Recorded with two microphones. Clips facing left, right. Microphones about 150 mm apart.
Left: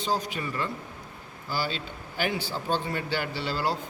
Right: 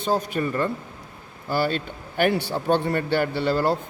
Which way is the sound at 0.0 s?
55° right (ahead or behind).